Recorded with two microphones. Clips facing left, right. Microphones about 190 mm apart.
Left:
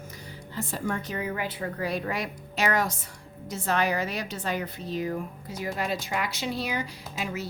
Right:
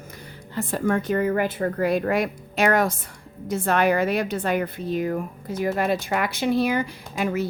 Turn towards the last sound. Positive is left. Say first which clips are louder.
# right 8 dB
turn(degrees=-55)  # may be behind; listen again after turning